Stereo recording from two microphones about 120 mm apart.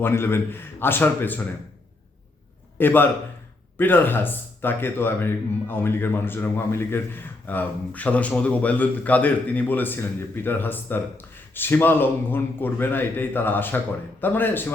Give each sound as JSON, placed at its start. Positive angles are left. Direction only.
{"t": 0.0, "sound": "a man's voice", "side_deg": 20}
{"t": 2.7, "sound": "a man's voice", "side_deg": 15}